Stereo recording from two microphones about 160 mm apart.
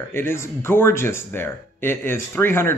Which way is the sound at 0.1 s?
15° left (ahead or behind).